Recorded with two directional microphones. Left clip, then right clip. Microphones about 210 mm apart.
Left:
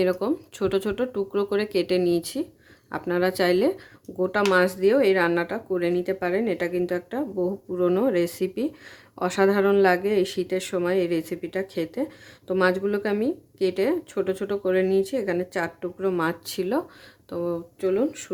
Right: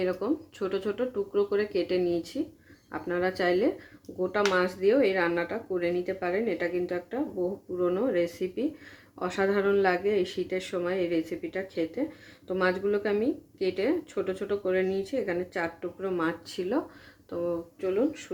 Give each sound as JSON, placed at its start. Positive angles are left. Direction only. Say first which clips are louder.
{"t": 0.0, "sound": "speech", "louder": "left 5 dB", "side_deg": 40}